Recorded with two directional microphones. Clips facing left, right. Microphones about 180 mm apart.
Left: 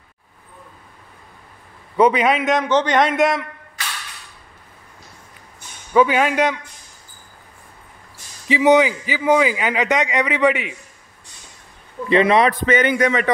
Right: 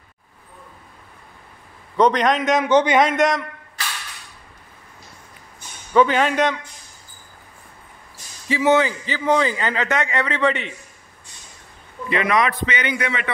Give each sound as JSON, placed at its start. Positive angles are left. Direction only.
{"t": 2.0, "sound": "a man's voice", "side_deg": 5}
{"t": 2.7, "sound": "a man's voice", "side_deg": -10}
{"t": 3.0, "sound": "a man's voice", "side_deg": 0}
{"t": 5.9, "sound": "a man's voice", "side_deg": 10}
{"t": 8.5, "sound": "a man's voice", "side_deg": 15}
{"t": 12.1, "sound": "a man's voice", "side_deg": 30}
{"t": 12.6, "sound": "a man's voice", "side_deg": 45}